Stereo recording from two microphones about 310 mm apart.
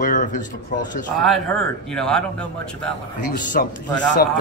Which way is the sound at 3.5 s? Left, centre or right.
Left.